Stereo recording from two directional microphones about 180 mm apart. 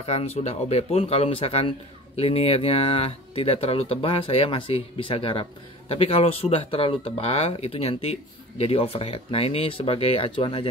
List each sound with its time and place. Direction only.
0.0 s speech: 35° left (ahead or behind)